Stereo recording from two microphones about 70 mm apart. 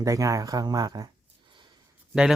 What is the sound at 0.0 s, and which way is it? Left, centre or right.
Speech, right.